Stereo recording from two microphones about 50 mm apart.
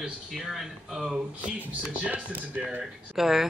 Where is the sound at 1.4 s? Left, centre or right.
Right.